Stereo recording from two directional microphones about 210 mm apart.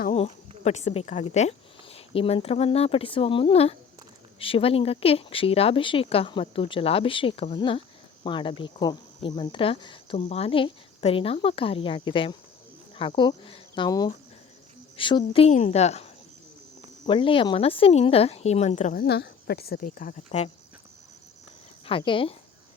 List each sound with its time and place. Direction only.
0.1 s a woman's voice: 30° left (ahead or behind)
17.1 s speech: 25° left (ahead or behind)
19.0 s a woman's voice: 50° left (ahead or behind)
21.8 s speech: 25° left (ahead or behind)